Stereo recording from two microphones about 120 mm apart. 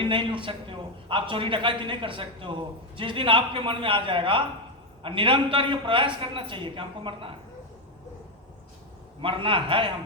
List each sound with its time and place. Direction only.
0.0 s a man's voice: 45° right (ahead or behind)
9.2 s a man's voice: 45° right (ahead or behind)